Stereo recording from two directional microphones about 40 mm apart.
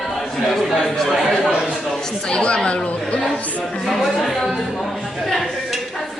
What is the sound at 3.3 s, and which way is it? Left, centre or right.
Speech, left.